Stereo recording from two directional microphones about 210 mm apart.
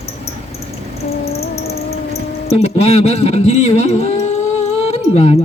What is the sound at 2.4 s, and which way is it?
Speech, 30° left (ahead or behind).